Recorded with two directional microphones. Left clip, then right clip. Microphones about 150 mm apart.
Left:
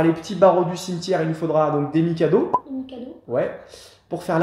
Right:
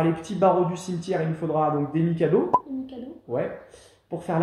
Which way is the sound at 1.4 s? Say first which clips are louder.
Left 5 dB; 55° left (ahead or behind).